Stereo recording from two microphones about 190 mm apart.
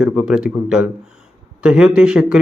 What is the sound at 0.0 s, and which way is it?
A man's voice, 5° right (ahead or behind).